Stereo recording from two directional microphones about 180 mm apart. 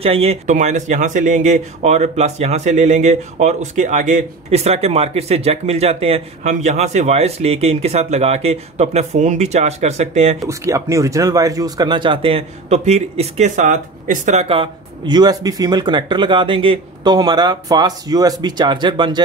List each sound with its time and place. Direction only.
0.0 s speech: 35° right (ahead or behind)
10.4 s speech: 15° right (ahead or behind)